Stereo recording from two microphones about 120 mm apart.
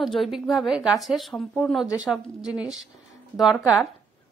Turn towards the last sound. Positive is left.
turn(degrees=0)  # may be behind; listen again after turning